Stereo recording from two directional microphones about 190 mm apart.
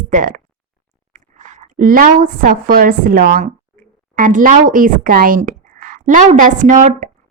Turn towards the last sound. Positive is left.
turn(degrees=-40)  # may be behind; listen again after turning